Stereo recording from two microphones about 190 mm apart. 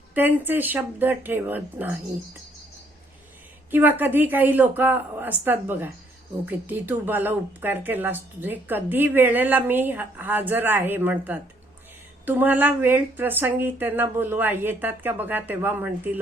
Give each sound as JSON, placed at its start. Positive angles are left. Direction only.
{"t": 0.1, "sound": "speech", "side_deg": -10}
{"t": 3.7, "sound": "speech", "side_deg": -10}